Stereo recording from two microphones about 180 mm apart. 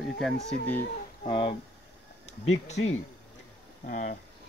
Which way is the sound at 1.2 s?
30° left (ahead or behind).